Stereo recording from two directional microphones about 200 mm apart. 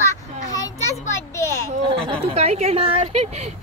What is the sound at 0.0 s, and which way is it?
Children playing, 15° left (ahead or behind).